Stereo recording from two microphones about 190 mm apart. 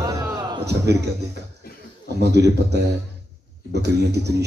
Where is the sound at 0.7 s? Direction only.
60° right (ahead or behind).